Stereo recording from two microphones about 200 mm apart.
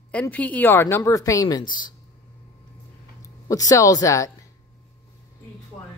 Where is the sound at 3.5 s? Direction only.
15° left (ahead or behind).